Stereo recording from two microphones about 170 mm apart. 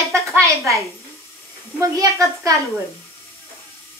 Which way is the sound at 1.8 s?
20° right (ahead or behind).